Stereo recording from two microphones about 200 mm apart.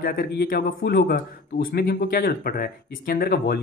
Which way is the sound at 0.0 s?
45° left (ahead or behind).